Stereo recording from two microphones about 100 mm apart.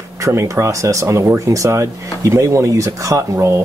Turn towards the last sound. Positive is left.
turn(degrees=-25)  # may be behind; listen again after turning